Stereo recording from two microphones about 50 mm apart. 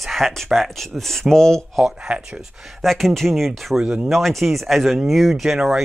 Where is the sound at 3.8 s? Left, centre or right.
Centre.